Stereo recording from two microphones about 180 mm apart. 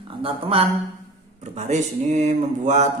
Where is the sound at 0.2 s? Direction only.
30° right (ahead or behind).